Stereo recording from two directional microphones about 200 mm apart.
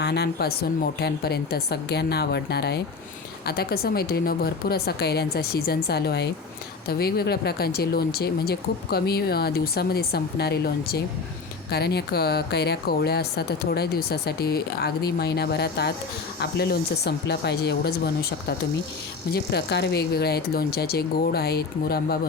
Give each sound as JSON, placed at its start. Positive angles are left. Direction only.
{"t": 0.0, "sound": "speech", "side_deg": 55}